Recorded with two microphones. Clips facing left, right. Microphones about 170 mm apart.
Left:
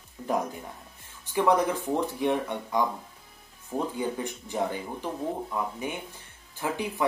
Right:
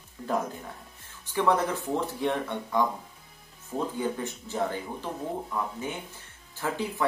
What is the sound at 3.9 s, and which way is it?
Speech, 15° left (ahead or behind).